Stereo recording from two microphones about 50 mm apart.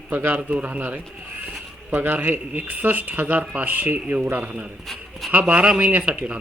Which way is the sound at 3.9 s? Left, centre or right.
Right.